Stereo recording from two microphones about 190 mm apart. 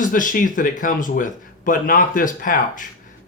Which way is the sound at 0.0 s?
45° left (ahead or behind).